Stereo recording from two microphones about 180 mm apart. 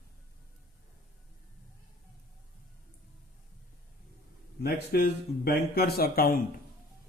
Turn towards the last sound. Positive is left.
turn(degrees=55)  # may be behind; listen again after turning